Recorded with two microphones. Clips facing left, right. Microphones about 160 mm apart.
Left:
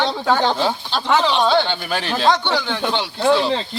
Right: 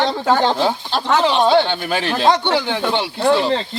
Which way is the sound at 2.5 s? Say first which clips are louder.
Right 3 dB; 15° right (ahead or behind).